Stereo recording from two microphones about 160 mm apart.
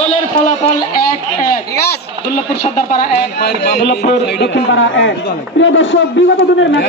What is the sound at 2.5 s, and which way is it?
Speech, 85° left.